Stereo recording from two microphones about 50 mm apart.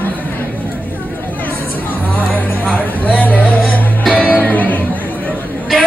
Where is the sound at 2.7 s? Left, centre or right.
Left.